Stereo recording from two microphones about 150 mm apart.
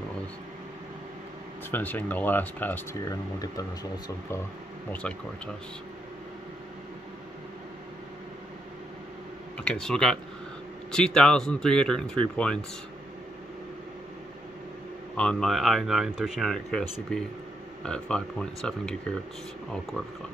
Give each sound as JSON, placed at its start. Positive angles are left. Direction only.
{"t": 1.7, "sound": "speech", "side_deg": 10}
{"t": 3.1, "sound": "speech", "side_deg": 25}
{"t": 9.6, "sound": "speech", "side_deg": 5}
{"t": 15.1, "sound": "speech", "side_deg": 5}